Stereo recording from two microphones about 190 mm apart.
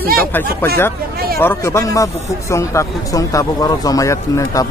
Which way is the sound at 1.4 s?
15° left (ahead or behind).